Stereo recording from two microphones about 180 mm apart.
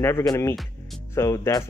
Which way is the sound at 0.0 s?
20° left (ahead or behind).